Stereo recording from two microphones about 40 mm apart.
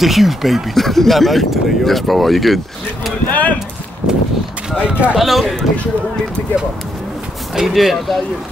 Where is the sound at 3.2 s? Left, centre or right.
Left.